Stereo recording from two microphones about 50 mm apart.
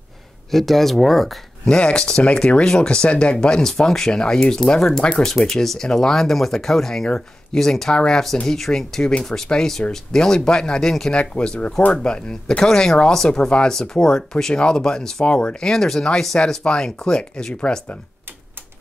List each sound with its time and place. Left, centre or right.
0.5 s speech: centre
1.7 s speech: centre
11.1 s speech: left